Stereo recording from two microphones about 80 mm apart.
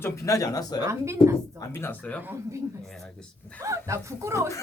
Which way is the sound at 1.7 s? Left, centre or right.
Left.